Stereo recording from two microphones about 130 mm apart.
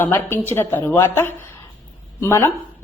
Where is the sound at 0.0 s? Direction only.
15° left (ahead or behind).